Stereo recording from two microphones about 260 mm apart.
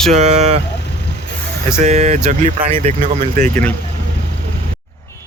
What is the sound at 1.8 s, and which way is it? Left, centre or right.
Speech, right.